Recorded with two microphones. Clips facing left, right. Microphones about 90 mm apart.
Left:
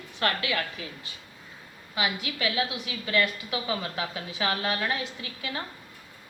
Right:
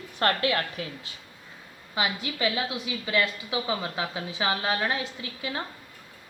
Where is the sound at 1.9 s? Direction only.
25° right (ahead or behind).